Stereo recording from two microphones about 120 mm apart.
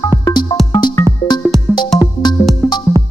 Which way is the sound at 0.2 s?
35° left (ahead or behind).